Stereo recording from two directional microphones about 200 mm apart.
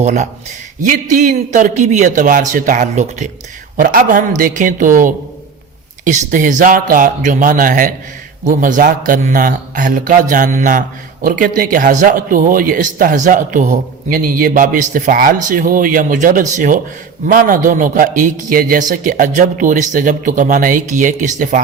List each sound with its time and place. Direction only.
0.0 s a man's voice: 35° right (ahead or behind)